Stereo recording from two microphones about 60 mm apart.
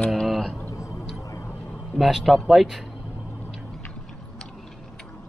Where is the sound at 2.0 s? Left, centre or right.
Centre.